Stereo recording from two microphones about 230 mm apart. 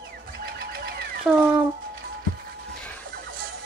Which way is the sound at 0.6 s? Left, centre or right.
Right.